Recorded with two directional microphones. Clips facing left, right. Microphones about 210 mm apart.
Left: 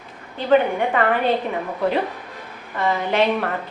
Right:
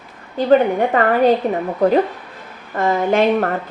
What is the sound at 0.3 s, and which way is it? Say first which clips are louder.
A woman's voice: right 4 dB; 40° right (ahead or behind).